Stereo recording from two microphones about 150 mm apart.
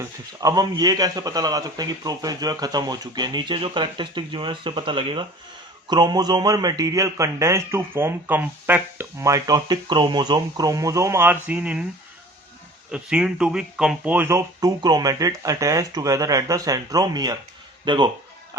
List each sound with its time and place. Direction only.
0.0 s a man's voice: 25° right (ahead or behind)
12.9 s a man's voice: 5° right (ahead or behind); by 18.1 s 30° right (ahead or behind)